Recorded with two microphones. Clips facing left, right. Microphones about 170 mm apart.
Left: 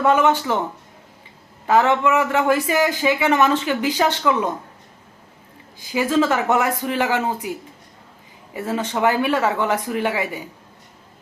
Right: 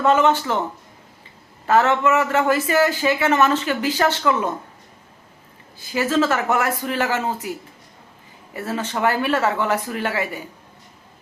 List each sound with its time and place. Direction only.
0.0 s a man's voice: 10° left (ahead or behind)
1.6 s a man's voice: 15° left (ahead or behind)
5.8 s a man's voice: 15° left (ahead or behind)
8.5 s a man's voice: 15° left (ahead or behind)